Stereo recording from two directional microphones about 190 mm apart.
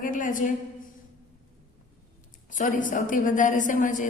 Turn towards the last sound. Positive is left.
turn(degrees=45)  # may be behind; listen again after turning